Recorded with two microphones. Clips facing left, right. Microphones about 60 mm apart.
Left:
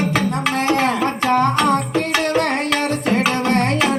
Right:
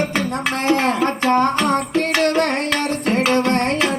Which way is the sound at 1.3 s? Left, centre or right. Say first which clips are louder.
Left 1 dB; right.